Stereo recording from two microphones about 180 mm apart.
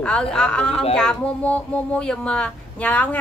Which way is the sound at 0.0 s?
5° left (ahead or behind).